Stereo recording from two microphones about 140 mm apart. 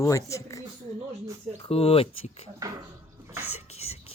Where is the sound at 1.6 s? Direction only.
45° left (ahead or behind).